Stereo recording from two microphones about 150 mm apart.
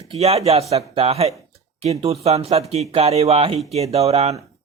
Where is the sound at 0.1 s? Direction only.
45° right (ahead or behind).